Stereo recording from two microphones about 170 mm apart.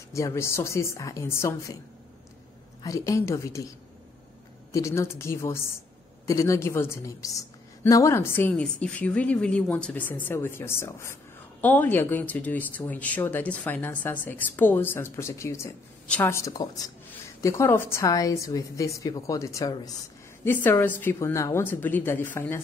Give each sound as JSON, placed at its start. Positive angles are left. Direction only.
{"t": 0.1, "sound": "speech", "side_deg": 15}
{"t": 2.8, "sound": "a woman's voice", "side_deg": 20}
{"t": 4.7, "sound": "a woman's voice", "side_deg": 15}
{"t": 20.4, "sound": "speech", "side_deg": 10}